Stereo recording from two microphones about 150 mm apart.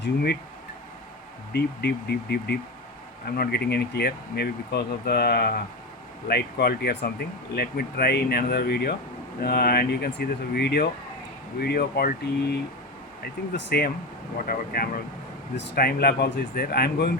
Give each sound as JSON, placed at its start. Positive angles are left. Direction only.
{"t": 1.5, "sound": "speech", "side_deg": 90}
{"t": 14.4, "sound": "speech", "side_deg": 75}
{"t": 15.7, "sound": "speech", "side_deg": 90}